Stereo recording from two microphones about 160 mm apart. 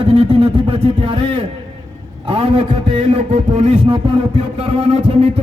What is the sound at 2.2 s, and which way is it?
A man's voice, 40° right (ahead or behind).